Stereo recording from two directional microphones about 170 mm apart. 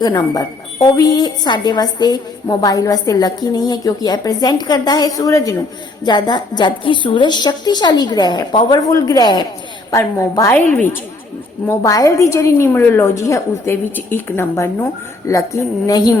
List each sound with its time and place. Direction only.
0.0 s a woman's voice: 20° left (ahead or behind)